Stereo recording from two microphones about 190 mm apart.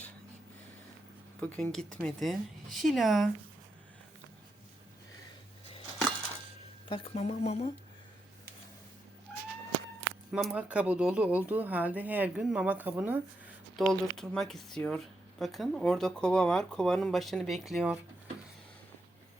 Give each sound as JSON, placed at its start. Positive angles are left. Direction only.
{"t": 1.4, "sound": "speech", "side_deg": 10}
{"t": 6.8, "sound": "speech", "side_deg": 30}
{"t": 10.3, "sound": "speech", "side_deg": -5}
{"t": 13.7, "sound": "speech", "side_deg": 0}